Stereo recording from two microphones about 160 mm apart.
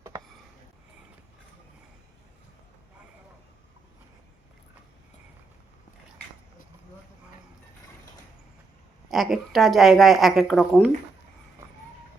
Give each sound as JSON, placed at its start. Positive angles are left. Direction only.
{"t": 9.0, "sound": "a woman's voice", "side_deg": 0}